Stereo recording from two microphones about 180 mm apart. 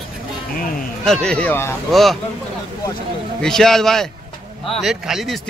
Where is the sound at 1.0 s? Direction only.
5° left (ahead or behind).